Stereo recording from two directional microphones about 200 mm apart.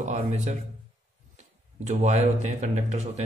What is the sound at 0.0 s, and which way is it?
Speech, 35° right (ahead or behind).